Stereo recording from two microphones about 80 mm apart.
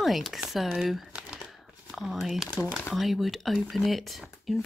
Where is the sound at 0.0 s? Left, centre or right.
Centre.